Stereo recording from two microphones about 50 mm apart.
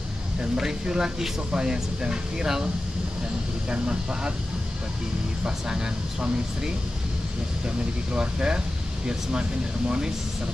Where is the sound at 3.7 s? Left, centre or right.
Centre.